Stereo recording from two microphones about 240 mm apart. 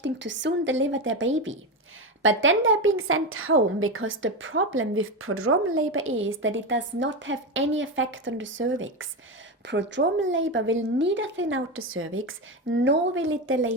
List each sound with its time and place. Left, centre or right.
0.0 s a woman's voice: right